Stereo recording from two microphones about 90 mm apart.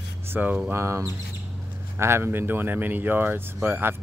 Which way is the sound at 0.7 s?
30° right (ahead or behind).